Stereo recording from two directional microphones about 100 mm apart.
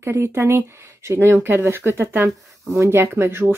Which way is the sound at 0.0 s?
25° right (ahead or behind).